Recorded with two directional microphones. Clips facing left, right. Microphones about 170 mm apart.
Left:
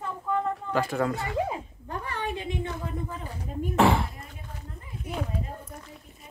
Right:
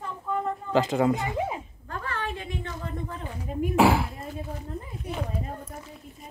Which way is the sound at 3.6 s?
5° right (ahead or behind).